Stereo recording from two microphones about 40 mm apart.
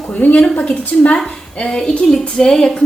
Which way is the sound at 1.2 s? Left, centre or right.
Centre.